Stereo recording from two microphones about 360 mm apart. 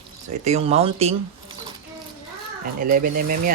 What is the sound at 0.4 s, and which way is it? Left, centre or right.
Speech, centre.